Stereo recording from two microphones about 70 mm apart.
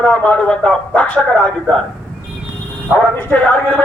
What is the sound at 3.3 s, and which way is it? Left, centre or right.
Speech, left.